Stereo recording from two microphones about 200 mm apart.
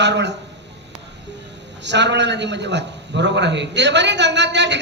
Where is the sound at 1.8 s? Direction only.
60° right (ahead or behind).